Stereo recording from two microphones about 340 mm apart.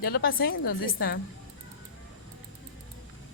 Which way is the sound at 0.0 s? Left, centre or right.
Left.